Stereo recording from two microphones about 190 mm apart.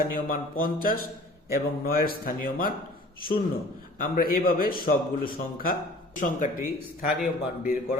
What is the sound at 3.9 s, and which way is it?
Speech, 45° left (ahead or behind).